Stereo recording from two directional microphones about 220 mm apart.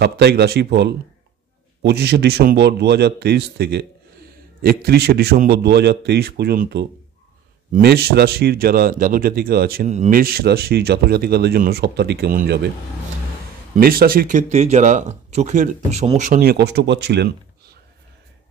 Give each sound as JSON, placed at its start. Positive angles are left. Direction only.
{"t": 0.0, "sound": "speech", "side_deg": -50}
{"t": 13.7, "sound": "speech", "side_deg": -40}